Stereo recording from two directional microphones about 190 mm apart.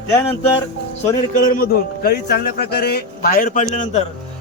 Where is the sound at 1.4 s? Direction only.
50° left (ahead or behind).